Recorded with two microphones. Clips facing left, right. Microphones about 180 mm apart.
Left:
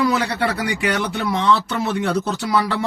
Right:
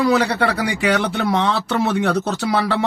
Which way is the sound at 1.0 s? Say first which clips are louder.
Right 1 dB; 55° right (ahead or behind).